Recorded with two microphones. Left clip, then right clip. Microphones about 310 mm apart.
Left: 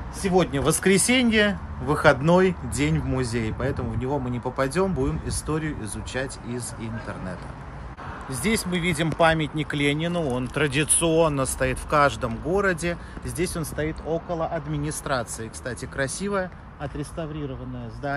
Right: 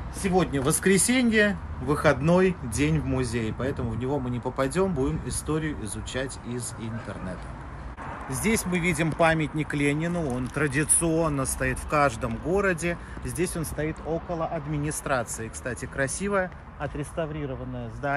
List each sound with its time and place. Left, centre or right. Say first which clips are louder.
0.3 s speech: left 3 dB; centre
8.7 s speech: left 1 dB; centre
10.5 s speech: left 2 dB; left
11.4 s speech: left 3 dB; centre